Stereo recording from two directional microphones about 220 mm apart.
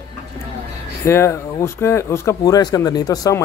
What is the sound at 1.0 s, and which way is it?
Speech, 10° left (ahead or behind).